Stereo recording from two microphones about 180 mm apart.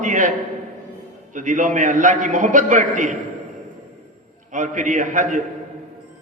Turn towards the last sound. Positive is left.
turn(degrees=-45)  # may be behind; listen again after turning